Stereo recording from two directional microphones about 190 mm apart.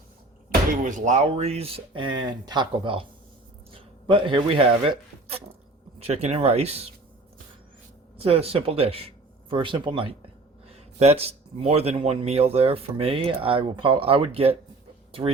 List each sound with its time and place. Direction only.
0.9 s a man's voice: 40° right (ahead or behind)
8.2 s a man's voice: 30° right (ahead or behind)